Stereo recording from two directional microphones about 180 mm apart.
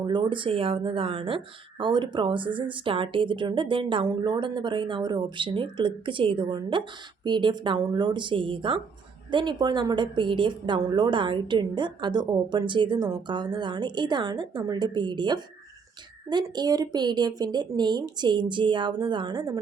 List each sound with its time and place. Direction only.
0.0 s a woman's voice: 25° right (ahead or behind)